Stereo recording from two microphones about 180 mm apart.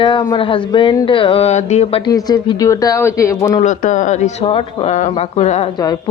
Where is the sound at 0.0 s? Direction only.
25° left (ahead or behind).